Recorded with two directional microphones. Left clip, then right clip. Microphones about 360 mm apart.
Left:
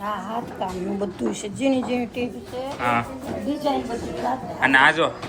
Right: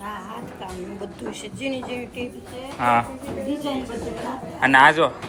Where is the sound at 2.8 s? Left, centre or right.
Centre.